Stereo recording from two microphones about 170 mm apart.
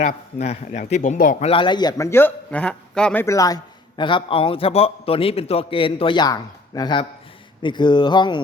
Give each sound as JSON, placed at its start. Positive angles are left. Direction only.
{"t": 0.0, "sound": "a man's voice", "side_deg": 45}
{"t": 1.5, "sound": "a man's voice", "side_deg": 30}